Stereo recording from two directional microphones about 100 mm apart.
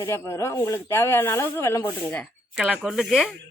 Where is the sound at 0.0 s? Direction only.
30° left (ahead or behind).